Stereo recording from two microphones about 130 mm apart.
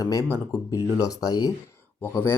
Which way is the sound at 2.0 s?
20° left (ahead or behind).